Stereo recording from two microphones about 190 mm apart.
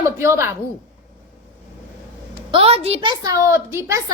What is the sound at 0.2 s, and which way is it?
Speech, 15° right (ahead or behind).